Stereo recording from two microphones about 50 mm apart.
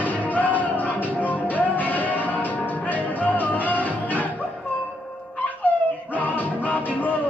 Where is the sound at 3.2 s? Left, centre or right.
Left.